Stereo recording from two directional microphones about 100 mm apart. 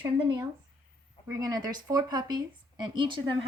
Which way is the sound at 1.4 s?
40° right (ahead or behind).